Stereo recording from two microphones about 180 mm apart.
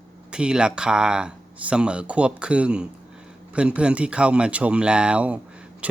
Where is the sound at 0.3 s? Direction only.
5° right (ahead or behind).